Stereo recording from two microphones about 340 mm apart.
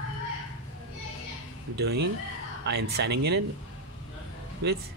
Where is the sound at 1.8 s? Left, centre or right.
Right.